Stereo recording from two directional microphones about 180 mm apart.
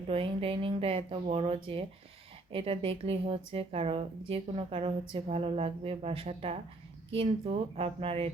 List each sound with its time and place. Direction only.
0.1 s speech: 30° right (ahead or behind)